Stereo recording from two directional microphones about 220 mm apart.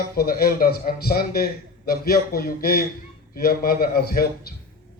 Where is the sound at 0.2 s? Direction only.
45° left (ahead or behind).